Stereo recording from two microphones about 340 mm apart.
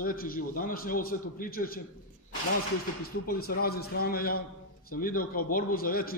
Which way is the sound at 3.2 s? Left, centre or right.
Left.